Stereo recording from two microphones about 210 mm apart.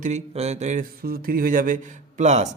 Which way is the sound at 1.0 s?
45° right (ahead or behind).